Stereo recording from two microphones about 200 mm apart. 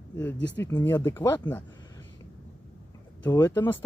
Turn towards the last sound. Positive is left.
turn(degrees=10)  # may be behind; listen again after turning